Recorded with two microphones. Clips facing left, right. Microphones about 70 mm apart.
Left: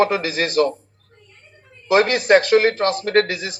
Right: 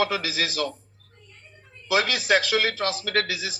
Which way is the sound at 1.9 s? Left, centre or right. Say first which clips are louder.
Left 8 dB; left.